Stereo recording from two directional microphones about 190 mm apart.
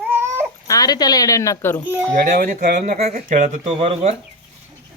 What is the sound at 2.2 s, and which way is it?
Speech, 45° right (ahead or behind).